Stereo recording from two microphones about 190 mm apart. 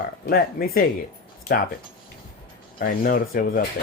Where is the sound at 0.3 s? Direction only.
50° left (ahead or behind).